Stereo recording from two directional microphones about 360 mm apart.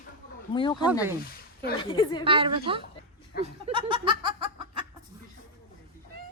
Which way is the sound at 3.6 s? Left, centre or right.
Centre.